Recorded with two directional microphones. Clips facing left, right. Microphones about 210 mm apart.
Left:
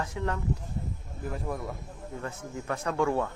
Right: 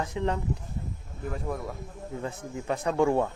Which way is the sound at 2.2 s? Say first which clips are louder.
Right 2 dB; 15° right (ahead or behind).